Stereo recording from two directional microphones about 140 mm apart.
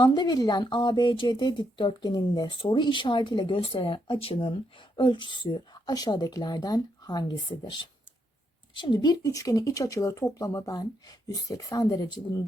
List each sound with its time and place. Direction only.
0.0 s speech: 30° left (ahead or behind)